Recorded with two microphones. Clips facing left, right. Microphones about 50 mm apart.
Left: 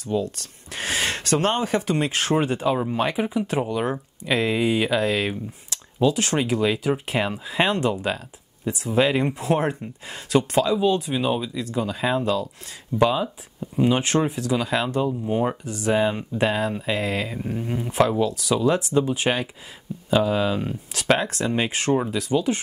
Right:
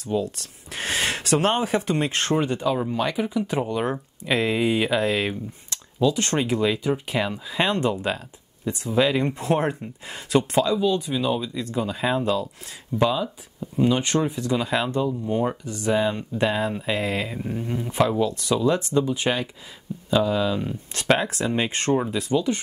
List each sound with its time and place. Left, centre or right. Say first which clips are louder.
0.0 s speech: even; centre
2.3 s speech: left 2 dB; centre
3.4 s speech: left 1 dB; centre
9.3 s speech: even; centre
10.8 s speech: left 1 dB; centre
11.5 s speech: even; centre
13.0 s speech: left 2 dB; centre
15.0 s speech: left 1 dB; centre
20.9 s speech: even; centre